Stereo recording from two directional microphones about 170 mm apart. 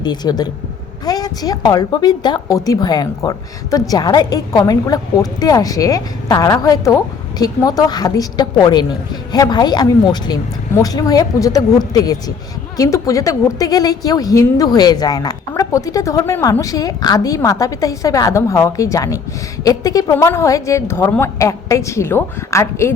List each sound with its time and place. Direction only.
0.0 s a woman's voice: 25° left (ahead or behind)